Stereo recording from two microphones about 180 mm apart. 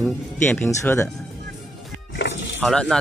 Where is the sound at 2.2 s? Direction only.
75° left (ahead or behind).